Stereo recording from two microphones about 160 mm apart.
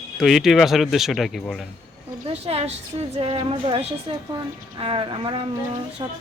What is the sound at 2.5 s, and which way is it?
A woman's voice, 40° right (ahead or behind).